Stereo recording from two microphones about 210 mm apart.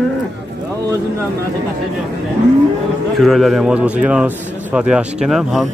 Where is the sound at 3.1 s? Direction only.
Centre (ahead or behind).